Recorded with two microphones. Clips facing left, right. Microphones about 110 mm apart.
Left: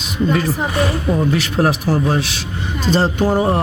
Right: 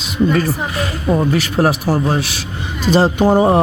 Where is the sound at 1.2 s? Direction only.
Centre (ahead or behind).